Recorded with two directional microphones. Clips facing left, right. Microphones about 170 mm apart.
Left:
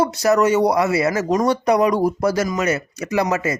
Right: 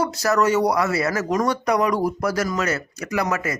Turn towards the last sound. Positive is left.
turn(degrees=25)  # may be behind; listen again after turning